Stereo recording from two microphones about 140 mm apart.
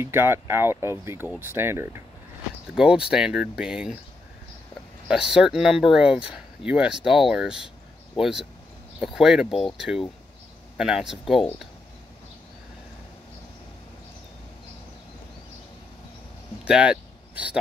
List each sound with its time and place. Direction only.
0.0 s speech: 15° right (ahead or behind)
2.7 s speech: 5° right (ahead or behind)
5.3 s speech: 5° right (ahead or behind)
16.6 s a sound: 5° right (ahead or behind)